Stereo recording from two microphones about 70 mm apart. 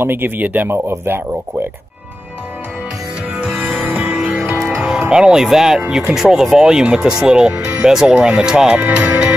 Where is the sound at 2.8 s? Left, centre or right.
Centre.